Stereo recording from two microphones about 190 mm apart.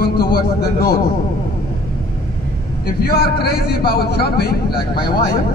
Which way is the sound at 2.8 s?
55° left (ahead or behind).